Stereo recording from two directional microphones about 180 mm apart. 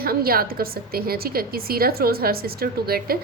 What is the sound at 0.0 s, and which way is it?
A woman's voice, 55° right (ahead or behind).